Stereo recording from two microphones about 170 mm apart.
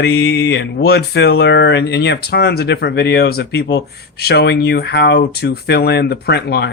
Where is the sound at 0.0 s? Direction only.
80° left.